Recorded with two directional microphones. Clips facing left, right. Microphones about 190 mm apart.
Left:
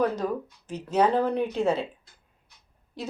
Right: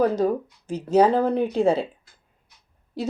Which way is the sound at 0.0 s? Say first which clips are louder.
Right 5 dB; 30° right (ahead or behind).